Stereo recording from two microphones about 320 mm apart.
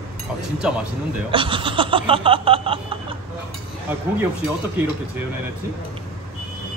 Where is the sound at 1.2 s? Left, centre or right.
Centre.